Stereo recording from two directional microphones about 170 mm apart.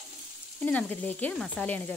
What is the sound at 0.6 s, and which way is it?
Stir, 10° left (ahead or behind).